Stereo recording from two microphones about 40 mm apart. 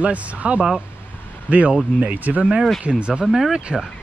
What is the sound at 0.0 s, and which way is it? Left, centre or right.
Speech, right.